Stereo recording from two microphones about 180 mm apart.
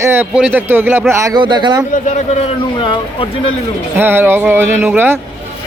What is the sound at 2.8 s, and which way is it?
Speech, 30° left (ahead or behind).